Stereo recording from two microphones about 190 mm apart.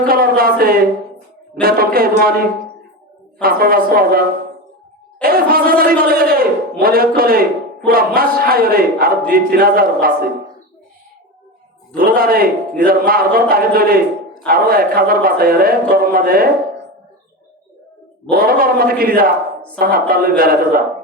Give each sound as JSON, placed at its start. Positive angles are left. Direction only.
{"t": 0.1, "sound": "a man's voice", "side_deg": -50}
{"t": 3.4, "sound": "a man's voice", "side_deg": -50}
{"t": 5.2, "sound": "a man's voice", "side_deg": -50}
{"t": 11.9, "sound": "a man's voice", "side_deg": -50}
{"t": 18.3, "sound": "a man's voice", "side_deg": -50}